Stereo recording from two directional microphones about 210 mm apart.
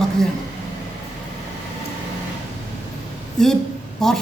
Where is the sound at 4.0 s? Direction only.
Centre (ahead or behind).